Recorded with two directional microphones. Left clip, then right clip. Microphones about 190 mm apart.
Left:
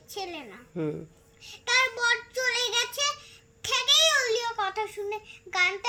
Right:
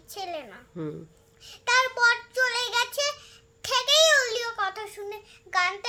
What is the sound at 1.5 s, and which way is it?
Child singing, 15° right (ahead or behind).